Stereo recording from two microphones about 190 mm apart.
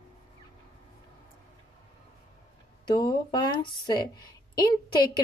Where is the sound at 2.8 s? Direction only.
25° left (ahead or behind).